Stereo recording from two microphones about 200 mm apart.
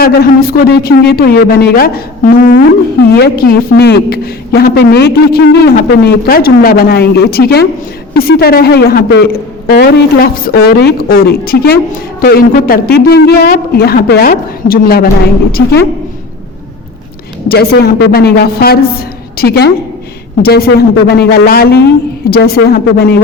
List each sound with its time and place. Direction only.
0.0 s a woman's voice: 50° left (ahead or behind)
17.5 s a woman's voice: 50° left (ahead or behind)